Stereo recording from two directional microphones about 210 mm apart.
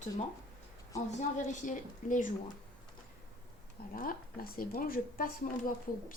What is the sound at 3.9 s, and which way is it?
Speech, 40° left (ahead or behind).